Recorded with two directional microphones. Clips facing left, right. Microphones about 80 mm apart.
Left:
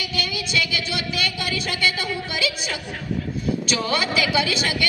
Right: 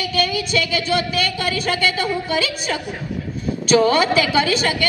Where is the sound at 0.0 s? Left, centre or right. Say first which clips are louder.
Right 7 dB; right.